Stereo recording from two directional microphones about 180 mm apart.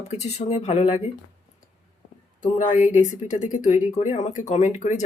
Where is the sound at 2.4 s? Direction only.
45° left (ahead or behind).